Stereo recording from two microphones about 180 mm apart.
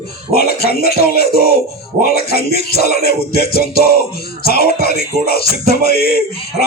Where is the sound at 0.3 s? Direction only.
60° left (ahead or behind).